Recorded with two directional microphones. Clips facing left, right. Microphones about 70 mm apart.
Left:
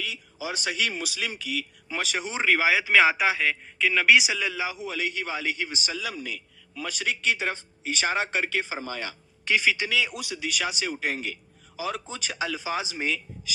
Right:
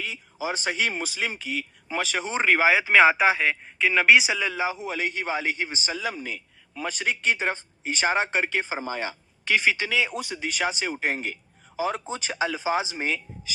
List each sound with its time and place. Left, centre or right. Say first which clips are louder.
0.0 s speech: right 3 dB; right